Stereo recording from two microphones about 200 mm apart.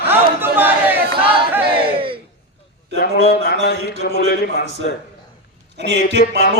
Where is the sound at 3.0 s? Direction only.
55° left (ahead or behind).